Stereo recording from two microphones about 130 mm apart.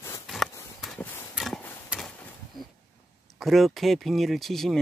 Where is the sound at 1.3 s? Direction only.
Centre (ahead or behind).